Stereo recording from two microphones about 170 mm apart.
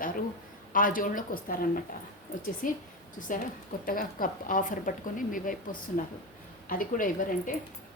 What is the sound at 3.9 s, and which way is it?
Speech, 55° left (ahead or behind).